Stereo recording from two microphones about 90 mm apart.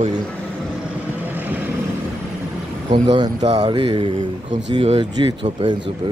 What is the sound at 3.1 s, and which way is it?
Speech, 60° right (ahead or behind).